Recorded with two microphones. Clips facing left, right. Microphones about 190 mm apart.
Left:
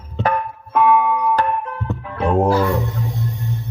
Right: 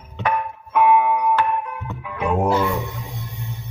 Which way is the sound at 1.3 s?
35° left (ahead or behind).